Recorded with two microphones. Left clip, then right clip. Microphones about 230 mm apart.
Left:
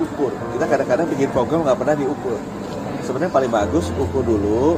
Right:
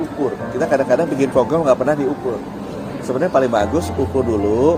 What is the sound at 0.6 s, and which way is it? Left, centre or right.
A man's voice, right.